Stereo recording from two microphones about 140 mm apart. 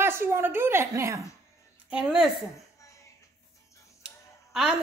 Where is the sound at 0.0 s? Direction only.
15° right (ahead or behind).